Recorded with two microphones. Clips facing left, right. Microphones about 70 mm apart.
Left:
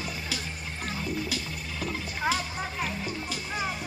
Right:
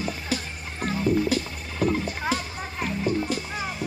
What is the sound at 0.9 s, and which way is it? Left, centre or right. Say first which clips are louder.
Music: right 10 dB; right.